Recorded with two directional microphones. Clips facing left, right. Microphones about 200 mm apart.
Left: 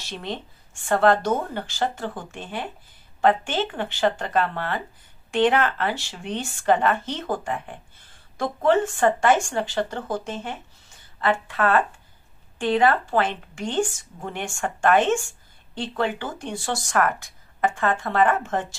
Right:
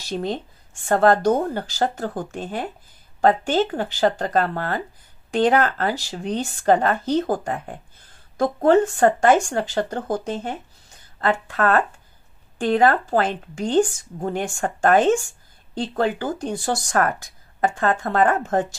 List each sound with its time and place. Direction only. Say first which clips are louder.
0.1 s speech: right 7 dB; 40° right (ahead or behind)